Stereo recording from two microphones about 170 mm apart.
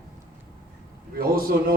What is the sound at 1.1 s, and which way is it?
Speech, 60° right (ahead or behind).